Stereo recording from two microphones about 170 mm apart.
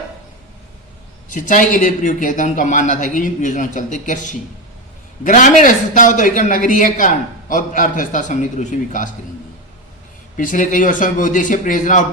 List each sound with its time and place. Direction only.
1.3 s a man's voice: 50° left (ahead or behind)
10.3 s a man's voice: 50° left (ahead or behind)